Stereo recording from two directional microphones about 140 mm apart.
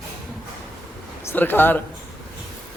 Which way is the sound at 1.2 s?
15° left (ahead or behind).